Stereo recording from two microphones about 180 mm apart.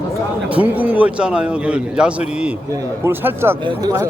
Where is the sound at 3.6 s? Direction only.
25° right (ahead or behind).